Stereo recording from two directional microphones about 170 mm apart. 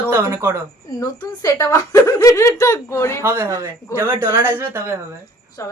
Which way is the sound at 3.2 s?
15° right (ahead or behind).